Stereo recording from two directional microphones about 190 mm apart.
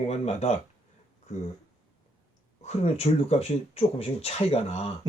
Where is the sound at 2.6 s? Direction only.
35° left (ahead or behind).